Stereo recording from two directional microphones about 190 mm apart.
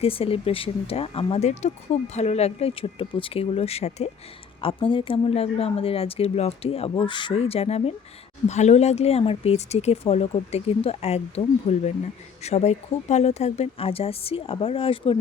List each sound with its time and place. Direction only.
0.0 s speech: 30° left (ahead or behind)